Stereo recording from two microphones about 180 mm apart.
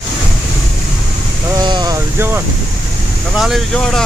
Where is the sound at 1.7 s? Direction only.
20° right (ahead or behind).